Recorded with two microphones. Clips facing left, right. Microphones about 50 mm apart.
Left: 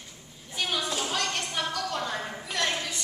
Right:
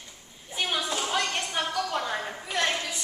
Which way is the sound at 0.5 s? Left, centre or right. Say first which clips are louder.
Right 1 dB; centre.